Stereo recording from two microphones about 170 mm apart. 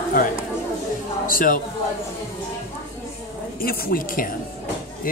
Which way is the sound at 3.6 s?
60° left (ahead or behind).